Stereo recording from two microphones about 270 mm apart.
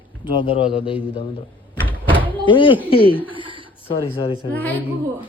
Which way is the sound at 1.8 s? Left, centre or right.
Centre.